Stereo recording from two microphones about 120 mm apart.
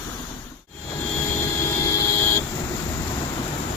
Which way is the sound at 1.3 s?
20° left (ahead or behind).